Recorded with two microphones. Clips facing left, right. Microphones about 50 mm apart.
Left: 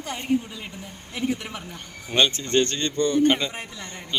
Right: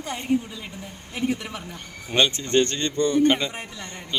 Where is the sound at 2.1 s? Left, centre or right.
Centre.